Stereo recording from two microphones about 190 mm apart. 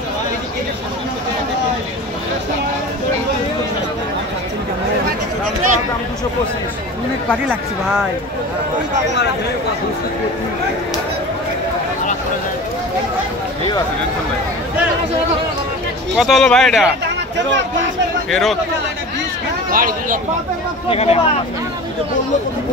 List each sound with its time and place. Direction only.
16.2 s speech: centre (ahead or behind)
18.3 s speech: centre (ahead or behind)
19.7 s speech: 50° right (ahead or behind)
20.9 s speech: 35° left (ahead or behind)